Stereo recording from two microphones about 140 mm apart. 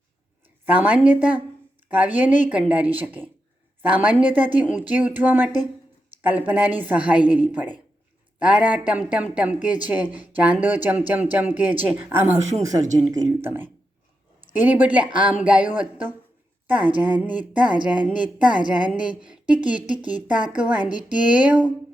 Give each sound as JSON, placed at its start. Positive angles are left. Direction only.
{"t": 0.6, "sound": "speech", "side_deg": -10}
{"t": 12.9, "sound": "speech", "side_deg": -25}